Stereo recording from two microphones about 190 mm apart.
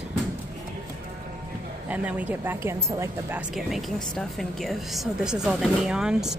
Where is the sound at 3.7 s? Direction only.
Centre (ahead or behind).